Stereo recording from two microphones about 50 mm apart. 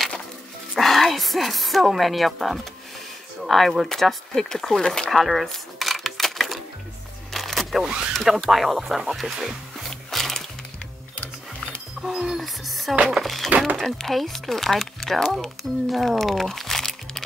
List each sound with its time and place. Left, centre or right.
0.7 s speech: centre
5.1 s a sound: centre
7.8 s speech: centre
8.1 s speech: centre
9.8 s music: centre
11.1 s music: left
12.1 s speech: centre
12.4 s speech: centre